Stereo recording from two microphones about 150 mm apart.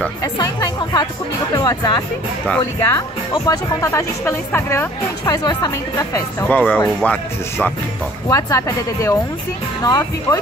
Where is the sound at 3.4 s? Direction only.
20° left (ahead or behind).